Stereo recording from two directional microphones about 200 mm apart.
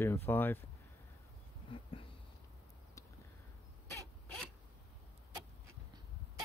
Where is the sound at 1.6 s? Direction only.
25° left (ahead or behind).